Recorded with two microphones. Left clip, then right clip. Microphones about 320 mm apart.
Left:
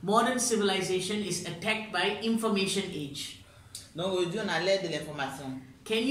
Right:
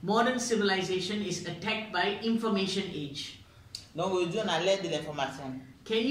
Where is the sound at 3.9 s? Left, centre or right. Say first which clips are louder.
Right 1 dB; centre.